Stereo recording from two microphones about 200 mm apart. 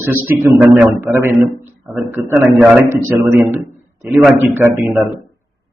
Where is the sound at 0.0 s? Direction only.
10° right (ahead or behind).